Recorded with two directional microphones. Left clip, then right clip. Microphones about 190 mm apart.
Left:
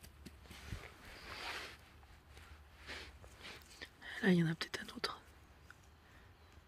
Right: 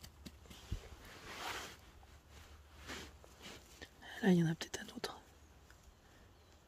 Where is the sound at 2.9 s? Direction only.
65° right (ahead or behind).